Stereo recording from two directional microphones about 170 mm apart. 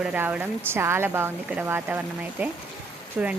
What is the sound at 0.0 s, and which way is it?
A woman's voice, 5° right (ahead or behind).